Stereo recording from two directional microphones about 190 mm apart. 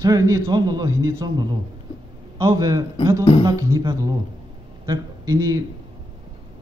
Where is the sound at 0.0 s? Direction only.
15° right (ahead or behind).